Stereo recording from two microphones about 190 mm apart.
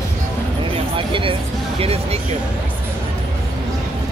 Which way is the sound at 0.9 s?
30° right (ahead or behind).